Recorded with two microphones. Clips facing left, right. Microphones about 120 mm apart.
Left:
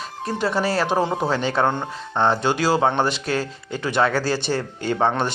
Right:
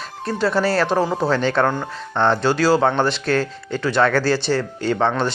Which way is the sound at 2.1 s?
10° left (ahead or behind).